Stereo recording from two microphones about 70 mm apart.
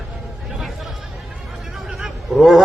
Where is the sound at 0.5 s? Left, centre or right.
Centre.